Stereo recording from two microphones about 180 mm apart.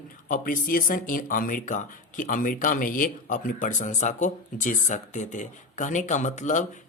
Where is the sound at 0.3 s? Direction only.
50° left (ahead or behind).